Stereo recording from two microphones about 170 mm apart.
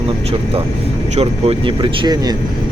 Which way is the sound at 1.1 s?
35° right (ahead or behind).